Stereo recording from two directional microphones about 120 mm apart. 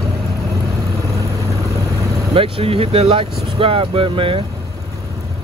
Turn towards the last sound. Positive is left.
turn(degrees=-45)  # may be behind; listen again after turning